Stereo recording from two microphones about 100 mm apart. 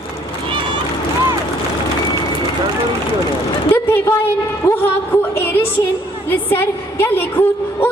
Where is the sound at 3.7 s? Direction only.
20° left (ahead or behind).